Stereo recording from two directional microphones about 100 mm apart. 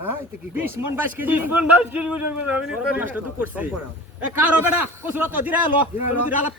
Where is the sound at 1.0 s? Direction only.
20° right (ahead or behind).